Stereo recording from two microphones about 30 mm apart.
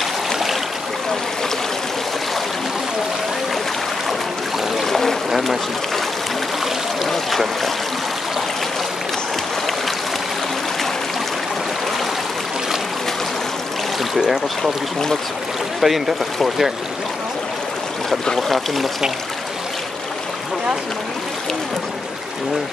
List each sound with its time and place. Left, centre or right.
4.8 s boat: centre
7.1 s boat: centre
14.6 s speech: centre
15.8 s speech: centre